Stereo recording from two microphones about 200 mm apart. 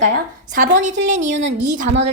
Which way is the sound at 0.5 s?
40° right (ahead or behind).